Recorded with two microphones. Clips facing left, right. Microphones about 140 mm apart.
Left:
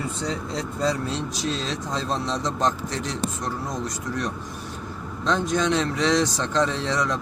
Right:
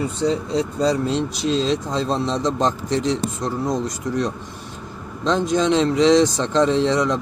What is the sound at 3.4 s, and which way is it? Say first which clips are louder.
Speech: right 6 dB; 25° right (ahead or behind).